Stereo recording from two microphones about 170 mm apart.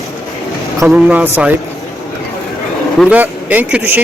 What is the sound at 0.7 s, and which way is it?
Speech, 10° right (ahead or behind).